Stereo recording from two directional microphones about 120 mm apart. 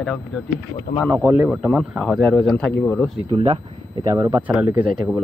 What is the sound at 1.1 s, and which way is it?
Speech, 20° right (ahead or behind).